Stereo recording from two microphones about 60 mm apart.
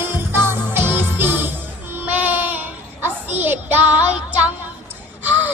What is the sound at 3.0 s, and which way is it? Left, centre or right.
Child singing, right.